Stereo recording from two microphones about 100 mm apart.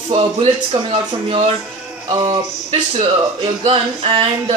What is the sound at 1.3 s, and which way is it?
Speech, 80° right.